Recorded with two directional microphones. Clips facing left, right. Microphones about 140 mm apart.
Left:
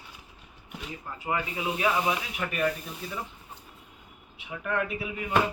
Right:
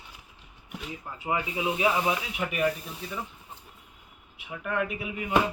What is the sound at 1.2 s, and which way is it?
Speech, 15° right (ahead or behind).